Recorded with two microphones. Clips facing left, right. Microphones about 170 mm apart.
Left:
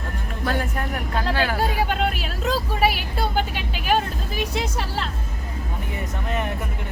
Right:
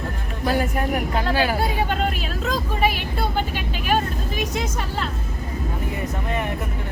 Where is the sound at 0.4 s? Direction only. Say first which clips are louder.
Right 4 dB; 15° right (ahead or behind).